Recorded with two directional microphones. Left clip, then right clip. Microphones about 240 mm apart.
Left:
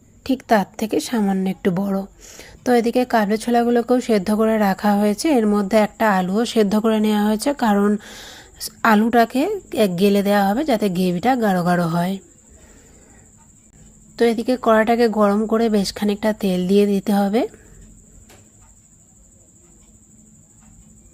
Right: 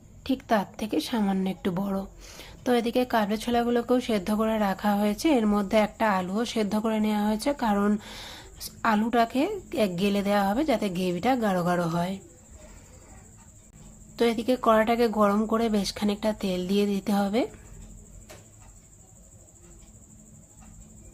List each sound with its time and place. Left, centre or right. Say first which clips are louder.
0.2 s speech: left 8 dB; left
14.2 s speech: left 6 dB; centre